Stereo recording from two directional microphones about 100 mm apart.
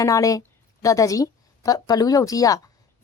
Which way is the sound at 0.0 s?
35° left (ahead or behind).